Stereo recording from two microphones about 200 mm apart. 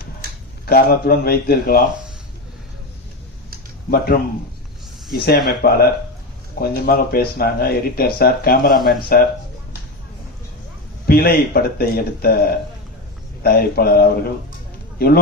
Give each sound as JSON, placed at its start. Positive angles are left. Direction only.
{"t": 0.6, "sound": "speech", "side_deg": 50}
{"t": 3.8, "sound": "speech", "side_deg": 50}
{"t": 11.0, "sound": "speech", "side_deg": 50}